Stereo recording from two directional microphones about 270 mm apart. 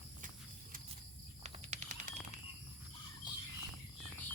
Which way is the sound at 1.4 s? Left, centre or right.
Right.